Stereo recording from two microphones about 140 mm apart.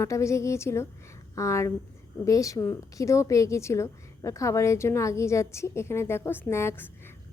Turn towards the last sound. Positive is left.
turn(degrees=15)  # may be behind; listen again after turning